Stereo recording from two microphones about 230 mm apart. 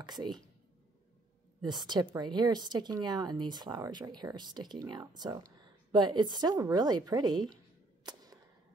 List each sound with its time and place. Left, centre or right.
0.0 s speech: centre
1.6 s a woman's voice: centre
8.0 s a sound: centre